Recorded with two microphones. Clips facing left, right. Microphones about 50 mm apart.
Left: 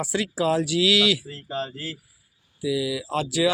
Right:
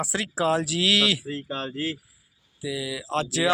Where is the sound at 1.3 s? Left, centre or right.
Right.